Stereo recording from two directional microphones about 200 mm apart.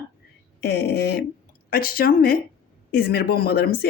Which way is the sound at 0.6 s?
55° left (ahead or behind).